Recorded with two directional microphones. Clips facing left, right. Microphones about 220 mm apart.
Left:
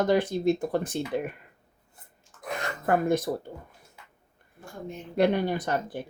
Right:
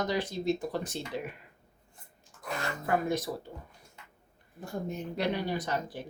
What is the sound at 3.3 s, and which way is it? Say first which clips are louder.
Speech: left 6 dB; 45° left (ahead or behind).